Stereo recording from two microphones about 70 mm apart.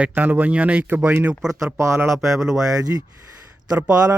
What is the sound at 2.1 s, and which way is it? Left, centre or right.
Speech, centre.